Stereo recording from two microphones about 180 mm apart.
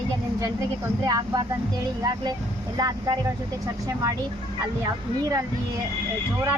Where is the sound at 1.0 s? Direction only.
20° right (ahead or behind).